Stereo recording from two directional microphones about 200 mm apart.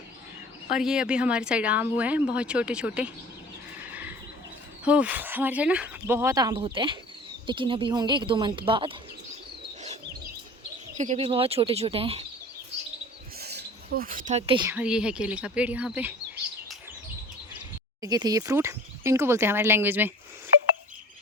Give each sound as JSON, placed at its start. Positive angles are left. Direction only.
{"t": 0.7, "sound": "speech", "side_deg": -5}
{"t": 3.8, "sound": "horse", "side_deg": -10}
{"t": 4.9, "sound": "speech", "side_deg": -5}
{"t": 10.9, "sound": "speech", "side_deg": -40}
{"t": 11.2, "sound": "speech", "side_deg": -25}
{"t": 13.4, "sound": "a sound", "side_deg": -55}
{"t": 14.7, "sound": "speech", "side_deg": -5}
{"t": 18.0, "sound": "speech", "side_deg": -20}